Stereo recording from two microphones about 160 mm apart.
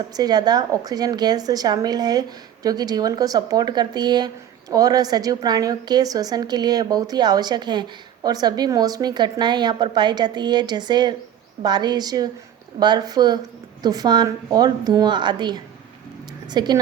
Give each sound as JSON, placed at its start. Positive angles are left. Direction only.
{"t": 0.1, "sound": "a woman's voice", "side_deg": -25}